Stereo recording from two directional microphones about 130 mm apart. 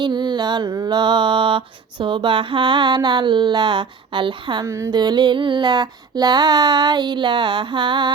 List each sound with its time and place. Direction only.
0.0 s mantra: 35° right (ahead or behind)
4.6 s mantra: 20° right (ahead or behind)